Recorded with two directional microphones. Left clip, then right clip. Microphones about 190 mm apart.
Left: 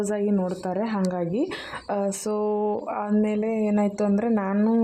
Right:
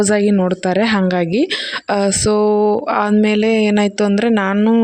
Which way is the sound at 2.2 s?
50° right (ahead or behind).